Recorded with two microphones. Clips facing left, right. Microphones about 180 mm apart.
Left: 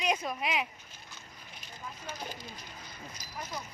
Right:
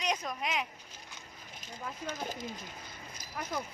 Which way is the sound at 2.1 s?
50° right (ahead or behind).